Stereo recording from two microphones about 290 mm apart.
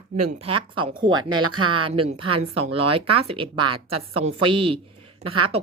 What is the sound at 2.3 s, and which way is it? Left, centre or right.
A woman's voice, centre.